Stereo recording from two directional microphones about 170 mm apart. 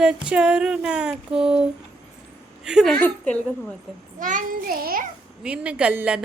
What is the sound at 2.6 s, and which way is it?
Speech, centre (ahead or behind).